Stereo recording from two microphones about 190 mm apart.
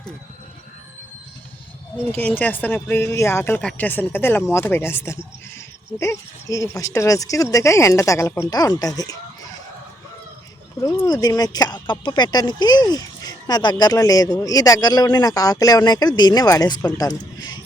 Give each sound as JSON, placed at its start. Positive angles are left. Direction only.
{"t": 2.1, "sound": "speech", "side_deg": 10}
{"t": 10.8, "sound": "speech", "side_deg": 20}